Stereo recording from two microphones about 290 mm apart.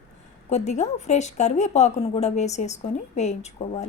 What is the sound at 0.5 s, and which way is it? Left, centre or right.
Speech, left.